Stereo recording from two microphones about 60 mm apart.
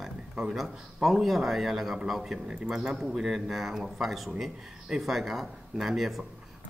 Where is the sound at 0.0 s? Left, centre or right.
Centre.